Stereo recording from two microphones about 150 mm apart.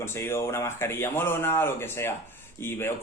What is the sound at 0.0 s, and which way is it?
Speech, 15° left (ahead or behind).